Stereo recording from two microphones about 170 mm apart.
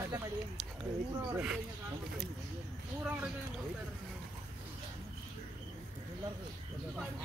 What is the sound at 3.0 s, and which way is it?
Speech, 10° right (ahead or behind).